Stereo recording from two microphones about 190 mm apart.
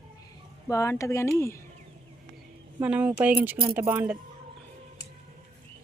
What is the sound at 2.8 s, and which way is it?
Speech, 5° right (ahead or behind).